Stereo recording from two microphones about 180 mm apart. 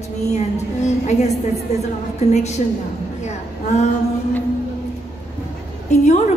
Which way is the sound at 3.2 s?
40° left (ahead or behind).